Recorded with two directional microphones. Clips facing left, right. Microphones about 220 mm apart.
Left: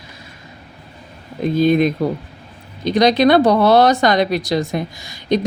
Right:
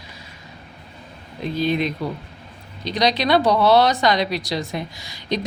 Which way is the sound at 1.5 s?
50° left (ahead or behind).